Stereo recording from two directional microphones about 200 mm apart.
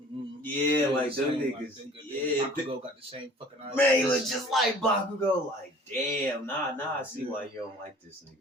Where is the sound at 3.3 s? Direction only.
30° right (ahead or behind).